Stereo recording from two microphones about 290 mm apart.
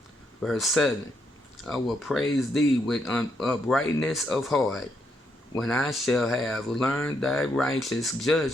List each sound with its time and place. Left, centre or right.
0.4 s speech: centre